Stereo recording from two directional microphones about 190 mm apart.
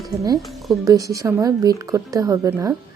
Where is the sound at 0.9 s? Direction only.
15° right (ahead or behind).